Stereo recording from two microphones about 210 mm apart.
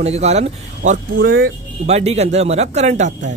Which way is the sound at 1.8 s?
30° right (ahead or behind).